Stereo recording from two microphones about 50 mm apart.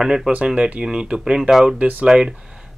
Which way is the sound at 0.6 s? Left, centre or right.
Right.